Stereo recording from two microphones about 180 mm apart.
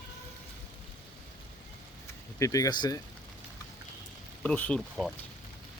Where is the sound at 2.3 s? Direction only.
20° left (ahead or behind).